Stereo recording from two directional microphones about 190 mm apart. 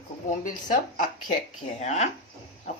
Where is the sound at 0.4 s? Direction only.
45° left (ahead or behind).